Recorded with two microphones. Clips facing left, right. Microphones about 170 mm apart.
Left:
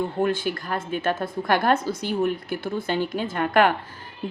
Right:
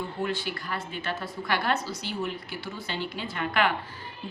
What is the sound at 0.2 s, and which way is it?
Speech, 50° left (ahead or behind).